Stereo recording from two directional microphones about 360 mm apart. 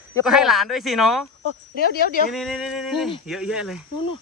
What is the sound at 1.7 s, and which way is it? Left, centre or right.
Speech, left.